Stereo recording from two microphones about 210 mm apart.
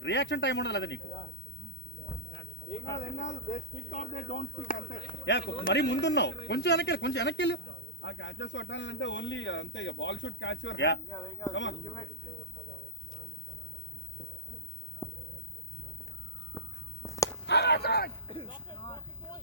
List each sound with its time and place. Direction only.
0.0 s speech: 55° left (ahead or behind)
3.0 s speech: 35° left (ahead or behind)
5.2 s speech: 55° left (ahead or behind)
11.1 s speech: 20° left (ahead or behind)
15.0 s a sound: 15° left (ahead or behind)
16.6 s a sound: 15° left (ahead or behind)
17.4 s speech: 50° left (ahead or behind)
18.3 s speech: 25° left (ahead or behind)
18.7 s vehicle: 20° left (ahead or behind)